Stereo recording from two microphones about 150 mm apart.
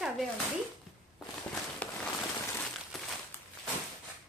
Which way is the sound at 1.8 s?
10° left (ahead or behind).